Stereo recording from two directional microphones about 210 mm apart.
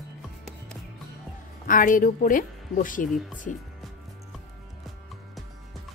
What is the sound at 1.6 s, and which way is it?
A woman's voice, 40° left (ahead or behind).